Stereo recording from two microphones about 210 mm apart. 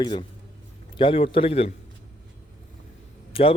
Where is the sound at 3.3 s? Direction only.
25° left (ahead or behind).